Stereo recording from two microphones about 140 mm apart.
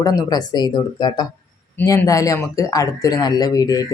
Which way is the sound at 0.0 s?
25° left (ahead or behind).